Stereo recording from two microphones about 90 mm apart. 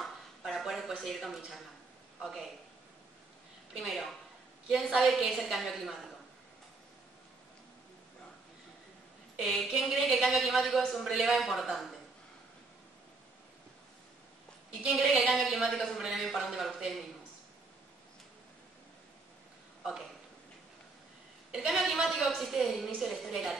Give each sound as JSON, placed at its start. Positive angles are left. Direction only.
{"t": 0.0, "sound": "a sound", "side_deg": 0}
{"t": 2.2, "sound": "speech", "side_deg": -5}
{"t": 3.7, "sound": "speech", "side_deg": -5}
{"t": 9.4, "sound": "speech", "side_deg": -5}
{"t": 14.8, "sound": "speech", "side_deg": -5}
{"t": 21.5, "sound": "speech", "side_deg": -5}